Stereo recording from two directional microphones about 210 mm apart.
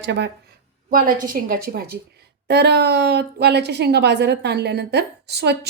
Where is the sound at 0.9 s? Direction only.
40° right (ahead or behind).